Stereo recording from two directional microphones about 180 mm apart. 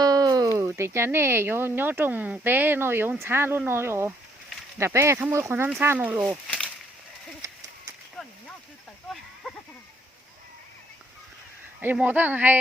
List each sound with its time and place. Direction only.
0.0 s speech: 20° right (ahead or behind)
7.4 s a sound: 20° right (ahead or behind)
11.8 s speech: 10° right (ahead or behind)